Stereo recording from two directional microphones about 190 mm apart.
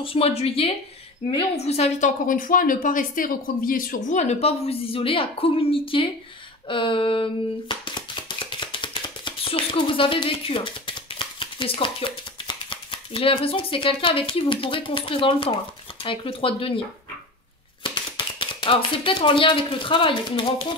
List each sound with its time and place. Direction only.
0.0 s a woman's voice: 30° left (ahead or behind)
6.7 s a sound: 25° left (ahead or behind)
17.8 s speech: 25° left (ahead or behind)